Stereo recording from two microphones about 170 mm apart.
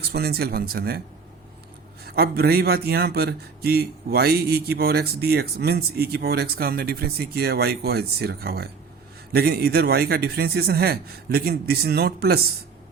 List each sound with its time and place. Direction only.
0.0 s a man's voice: 70° right (ahead or behind)
2.0 s a man's voice: 65° right (ahead or behind)